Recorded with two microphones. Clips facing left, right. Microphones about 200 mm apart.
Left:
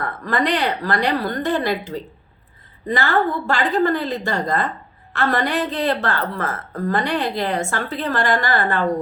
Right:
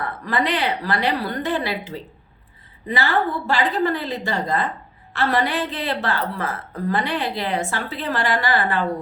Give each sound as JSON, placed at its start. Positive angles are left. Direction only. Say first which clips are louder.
{"t": 0.0, "sound": "a woman's voice", "louder": "left 2 dB", "side_deg": 50}
{"t": 2.8, "sound": "a woman's voice", "louder": "left 2 dB", "side_deg": 45}